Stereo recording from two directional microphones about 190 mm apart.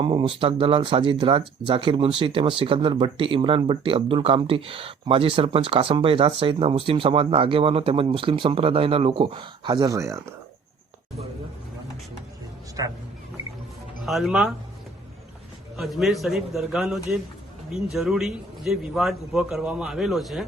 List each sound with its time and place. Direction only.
0.0 s speech: 25° right (ahead or behind)
14.0 s a man's voice: centre (ahead or behind)
15.7 s a man's voice: centre (ahead or behind)